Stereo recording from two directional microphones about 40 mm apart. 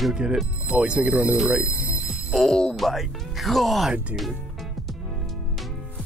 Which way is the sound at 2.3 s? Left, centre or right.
Centre.